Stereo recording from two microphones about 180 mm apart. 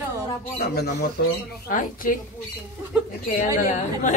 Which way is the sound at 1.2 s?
60° left (ahead or behind).